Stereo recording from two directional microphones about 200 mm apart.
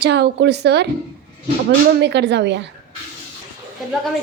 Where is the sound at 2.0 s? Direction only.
60° right (ahead or behind).